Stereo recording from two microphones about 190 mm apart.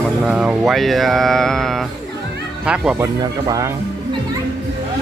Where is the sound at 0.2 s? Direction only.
5° right (ahead or behind).